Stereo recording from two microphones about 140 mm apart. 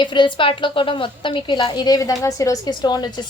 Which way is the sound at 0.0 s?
35° left (ahead or behind).